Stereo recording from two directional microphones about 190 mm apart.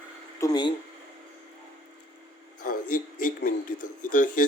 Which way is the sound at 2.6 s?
45° left (ahead or behind).